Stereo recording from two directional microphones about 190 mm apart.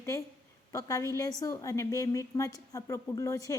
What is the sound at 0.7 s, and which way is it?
A woman's voice, 15° left (ahead or behind).